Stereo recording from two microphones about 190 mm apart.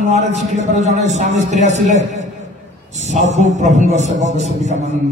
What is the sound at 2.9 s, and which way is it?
A man's voice, 35° right (ahead or behind).